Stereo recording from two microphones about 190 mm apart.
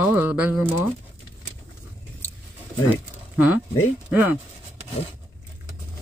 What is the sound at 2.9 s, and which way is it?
Speech, 10° right (ahead or behind).